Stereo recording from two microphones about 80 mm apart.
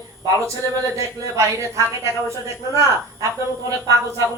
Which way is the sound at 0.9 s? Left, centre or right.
Right.